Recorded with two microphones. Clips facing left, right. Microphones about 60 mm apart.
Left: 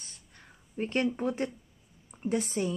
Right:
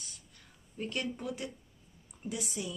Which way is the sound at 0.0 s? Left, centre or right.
Left.